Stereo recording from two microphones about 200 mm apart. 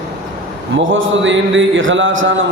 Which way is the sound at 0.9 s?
75° right (ahead or behind).